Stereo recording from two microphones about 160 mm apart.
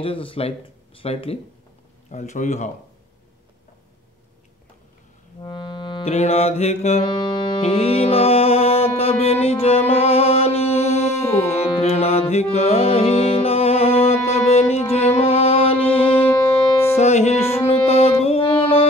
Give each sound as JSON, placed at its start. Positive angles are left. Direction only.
{"t": 0.0, "sound": "music", "side_deg": 35}
{"t": 2.0, "sound": "speech", "side_deg": 50}
{"t": 5.4, "sound": "music", "side_deg": 30}
{"t": 7.1, "sound": "music", "side_deg": 30}
{"t": 16.1, "sound": "music", "side_deg": 10}
{"t": 16.9, "sound": "music", "side_deg": 45}